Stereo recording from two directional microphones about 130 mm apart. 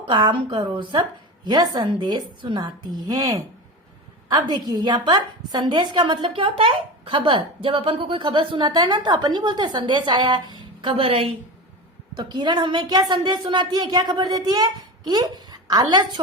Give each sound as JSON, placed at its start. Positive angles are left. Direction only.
{"t": 0.0, "sound": "a woman's voice", "side_deg": -40}
{"t": 12.1, "sound": "a woman's voice", "side_deg": -35}